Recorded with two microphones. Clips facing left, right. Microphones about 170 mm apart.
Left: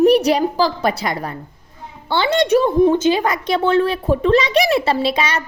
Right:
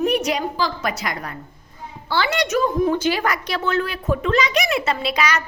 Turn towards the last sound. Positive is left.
turn(degrees=25)  # may be behind; listen again after turning